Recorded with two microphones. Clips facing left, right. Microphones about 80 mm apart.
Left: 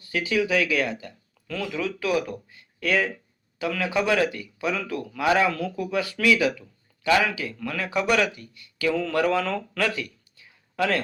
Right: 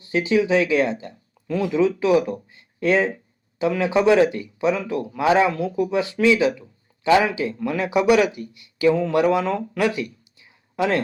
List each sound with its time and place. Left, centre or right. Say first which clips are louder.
0.0 s speech: right 5 dB; right